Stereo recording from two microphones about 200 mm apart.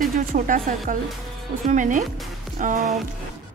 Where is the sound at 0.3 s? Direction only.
40° right (ahead or behind).